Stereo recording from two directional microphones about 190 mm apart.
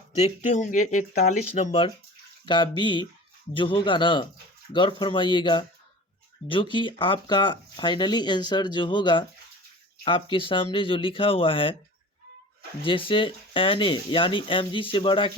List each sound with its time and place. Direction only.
0.2 s speech: 40° left (ahead or behind)
12.8 s speech: 25° left (ahead or behind)